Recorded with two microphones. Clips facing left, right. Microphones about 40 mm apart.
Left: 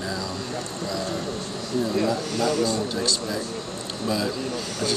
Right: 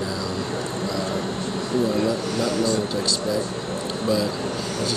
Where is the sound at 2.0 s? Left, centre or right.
Centre.